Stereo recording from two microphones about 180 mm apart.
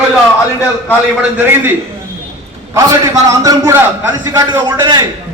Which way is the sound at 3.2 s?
20° right (ahead or behind).